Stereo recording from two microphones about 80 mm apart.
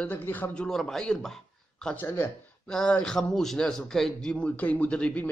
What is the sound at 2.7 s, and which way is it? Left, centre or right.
A man's voice, centre.